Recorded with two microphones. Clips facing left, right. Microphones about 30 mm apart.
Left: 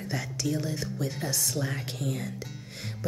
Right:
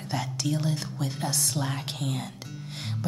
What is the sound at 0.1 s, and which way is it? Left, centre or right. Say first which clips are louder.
Speech: right 2 dB; right.